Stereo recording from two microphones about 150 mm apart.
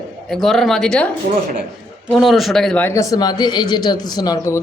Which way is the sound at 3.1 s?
25° left (ahead or behind).